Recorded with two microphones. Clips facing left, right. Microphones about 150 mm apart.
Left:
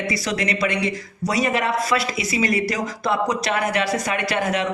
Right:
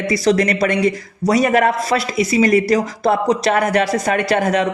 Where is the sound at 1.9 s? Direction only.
40° right (ahead or behind).